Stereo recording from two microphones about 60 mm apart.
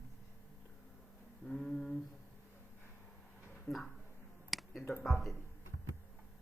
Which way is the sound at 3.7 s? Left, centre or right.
Left.